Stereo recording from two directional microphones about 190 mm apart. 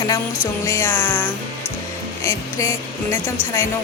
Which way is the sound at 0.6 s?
15° left (ahead or behind).